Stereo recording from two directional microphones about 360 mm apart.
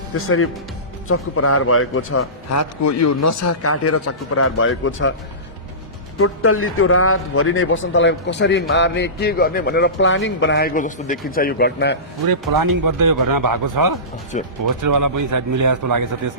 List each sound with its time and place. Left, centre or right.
0.1 s a man's voice: left
6.1 s a man's voice: left
12.3 s speech: right
14.3 s a man's voice: centre
14.8 s speech: right